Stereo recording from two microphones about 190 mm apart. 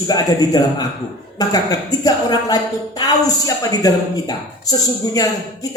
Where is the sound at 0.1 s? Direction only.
20° left (ahead or behind).